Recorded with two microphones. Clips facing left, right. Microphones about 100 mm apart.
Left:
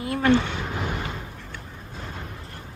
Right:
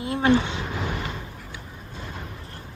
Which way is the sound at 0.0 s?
25° right (ahead or behind).